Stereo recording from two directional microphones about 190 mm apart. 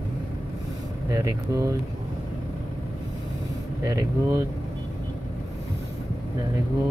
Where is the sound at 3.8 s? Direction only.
20° right (ahead or behind).